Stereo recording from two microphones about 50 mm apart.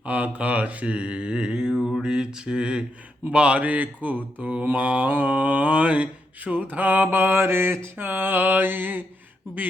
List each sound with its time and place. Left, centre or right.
0.0 s mantra: right; by 1.9 s centre
2.0 s speech: centre
3.3 s mantra: right